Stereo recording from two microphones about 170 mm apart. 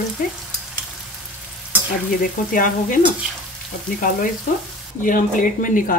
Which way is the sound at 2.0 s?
55° left (ahead or behind).